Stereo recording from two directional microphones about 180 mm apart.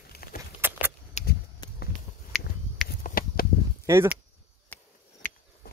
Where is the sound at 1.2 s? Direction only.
40° left (ahead or behind).